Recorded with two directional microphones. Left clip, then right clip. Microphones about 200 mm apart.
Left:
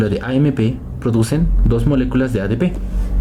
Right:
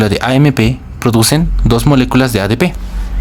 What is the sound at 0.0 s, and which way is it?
Speech, 25° right (ahead or behind).